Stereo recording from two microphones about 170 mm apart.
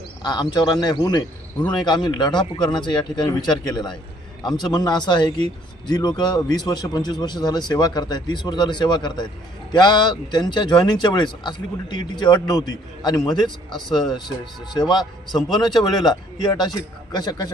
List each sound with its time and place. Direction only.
0.2 s speech: 25° left (ahead or behind)